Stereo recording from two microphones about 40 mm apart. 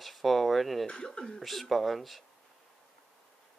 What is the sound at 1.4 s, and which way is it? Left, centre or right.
Speech, centre.